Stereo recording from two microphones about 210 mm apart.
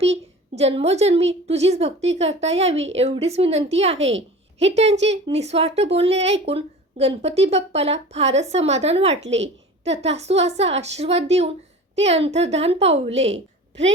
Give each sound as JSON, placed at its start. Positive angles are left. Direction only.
{"t": 0.0, "sound": "a woman's voice", "side_deg": -30}